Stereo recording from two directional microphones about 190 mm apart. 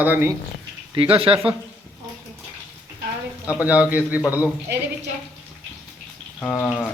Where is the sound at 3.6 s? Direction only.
10° right (ahead or behind).